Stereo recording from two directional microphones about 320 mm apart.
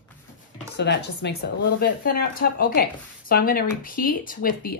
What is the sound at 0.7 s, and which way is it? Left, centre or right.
Speech, left.